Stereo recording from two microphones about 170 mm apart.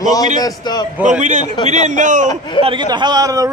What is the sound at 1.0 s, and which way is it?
A man's voice, 45° right (ahead or behind).